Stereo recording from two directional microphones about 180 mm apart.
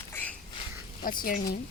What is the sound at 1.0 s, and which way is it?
Speech, 50° left (ahead or behind).